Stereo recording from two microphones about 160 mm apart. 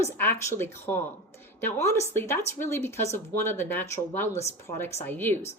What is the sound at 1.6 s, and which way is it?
Speech, 15° left (ahead or behind).